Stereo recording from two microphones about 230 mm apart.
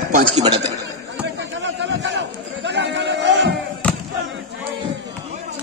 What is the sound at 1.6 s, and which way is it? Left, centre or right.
Chatter, right.